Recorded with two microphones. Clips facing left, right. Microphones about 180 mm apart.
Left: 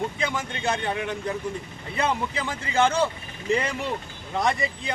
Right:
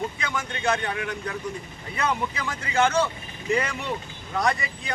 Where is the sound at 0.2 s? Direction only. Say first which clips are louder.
Left 2 dB; 30° left (ahead or behind).